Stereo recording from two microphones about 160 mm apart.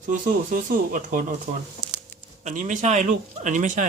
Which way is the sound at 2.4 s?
50° right (ahead or behind).